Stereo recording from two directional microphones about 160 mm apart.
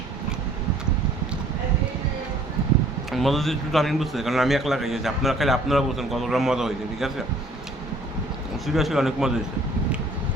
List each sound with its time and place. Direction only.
3.1 s a man's voice: centre (ahead or behind)
8.6 s a man's voice: centre (ahead or behind)